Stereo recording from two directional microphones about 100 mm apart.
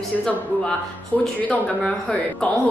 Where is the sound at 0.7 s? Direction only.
10° left (ahead or behind).